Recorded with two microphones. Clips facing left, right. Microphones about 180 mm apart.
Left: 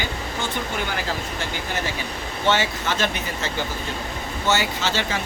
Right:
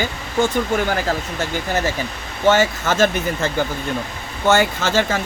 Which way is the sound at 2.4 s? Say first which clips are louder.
Right 6 dB; 45° right (ahead or behind).